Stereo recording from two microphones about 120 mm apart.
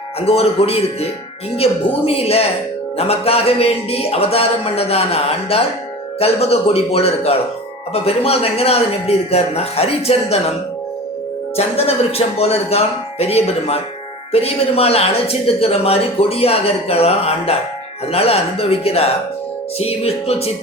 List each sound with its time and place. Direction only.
0.2 s speech: 55° left (ahead or behind)
11.5 s speech: 55° left (ahead or behind)